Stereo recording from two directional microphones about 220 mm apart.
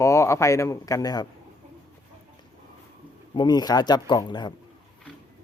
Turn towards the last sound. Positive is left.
turn(degrees=20)  # may be behind; listen again after turning